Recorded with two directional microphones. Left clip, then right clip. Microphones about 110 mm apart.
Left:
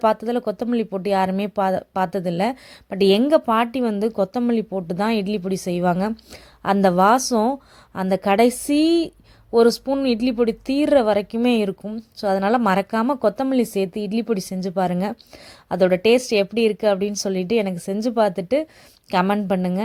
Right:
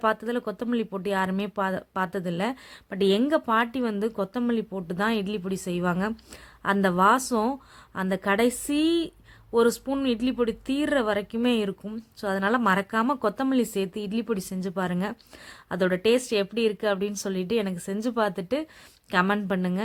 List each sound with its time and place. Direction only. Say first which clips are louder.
0.0 s a woman's voice: left 6 dB; 35° left (ahead or behind)
9.8 s speech: left 7 dB; 20° left (ahead or behind)
10.1 s a woman's voice: left 5 dB; 35° left (ahead or behind)